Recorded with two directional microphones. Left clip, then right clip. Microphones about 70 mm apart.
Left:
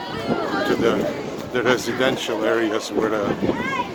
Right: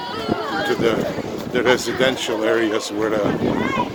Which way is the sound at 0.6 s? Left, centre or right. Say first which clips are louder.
Right 1 dB; right.